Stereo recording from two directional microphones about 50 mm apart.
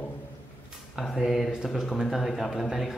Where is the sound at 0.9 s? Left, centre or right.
Centre.